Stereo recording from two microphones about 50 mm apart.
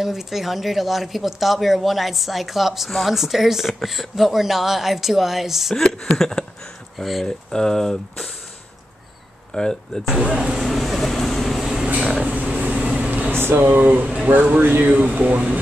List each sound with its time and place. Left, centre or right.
0.0 s speech: centre
5.9 s speech: centre
7.0 s speech: centre
7.2 s speech: centre
9.5 s speech: centre
10.1 s speech: centre
10.6 s vehicle: centre
12.2 s vehicle: right
13.3 s speech: right